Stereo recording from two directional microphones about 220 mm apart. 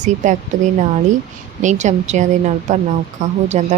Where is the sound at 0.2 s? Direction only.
35° right (ahead or behind).